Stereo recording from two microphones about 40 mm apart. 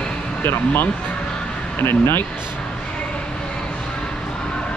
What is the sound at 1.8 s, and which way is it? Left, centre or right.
Speech, left.